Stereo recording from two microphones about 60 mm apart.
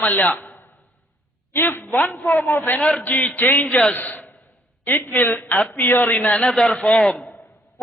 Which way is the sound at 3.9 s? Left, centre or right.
Left.